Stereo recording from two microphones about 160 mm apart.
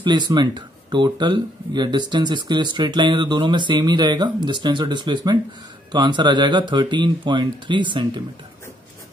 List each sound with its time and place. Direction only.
0.0 s speech: 30° right (ahead or behind)